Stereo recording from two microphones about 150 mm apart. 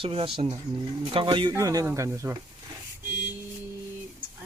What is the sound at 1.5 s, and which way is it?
Speech, 20° right (ahead or behind).